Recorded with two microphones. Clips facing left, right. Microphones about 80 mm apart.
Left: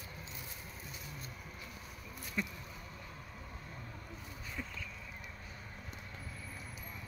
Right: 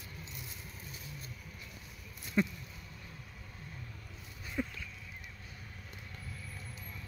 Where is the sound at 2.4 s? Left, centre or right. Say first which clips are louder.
Right 8 dB; right.